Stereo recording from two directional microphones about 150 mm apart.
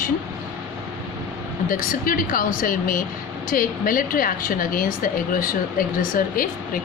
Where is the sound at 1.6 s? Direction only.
65° left (ahead or behind).